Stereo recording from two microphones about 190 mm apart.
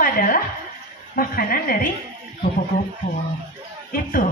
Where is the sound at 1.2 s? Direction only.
50° left (ahead or behind).